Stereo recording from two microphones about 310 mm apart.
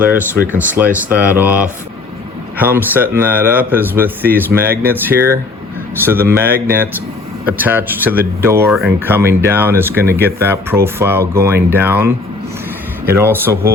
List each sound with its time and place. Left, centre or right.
0.0 s speech: centre
4.6 s speech: right
4.9 s speech: centre
13.1 s speech: centre